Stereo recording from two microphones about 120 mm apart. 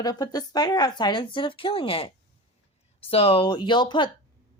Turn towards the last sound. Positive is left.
turn(degrees=40)  # may be behind; listen again after turning